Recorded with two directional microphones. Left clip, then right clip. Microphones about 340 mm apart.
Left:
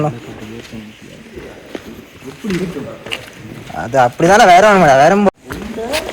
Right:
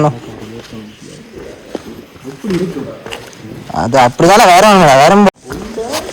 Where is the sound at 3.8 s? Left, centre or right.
Right.